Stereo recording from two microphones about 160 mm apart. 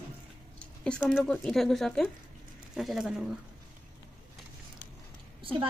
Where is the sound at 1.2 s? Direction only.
5° left (ahead or behind).